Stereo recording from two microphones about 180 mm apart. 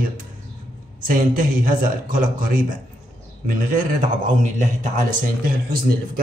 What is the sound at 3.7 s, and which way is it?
Speech, 50° right (ahead or behind).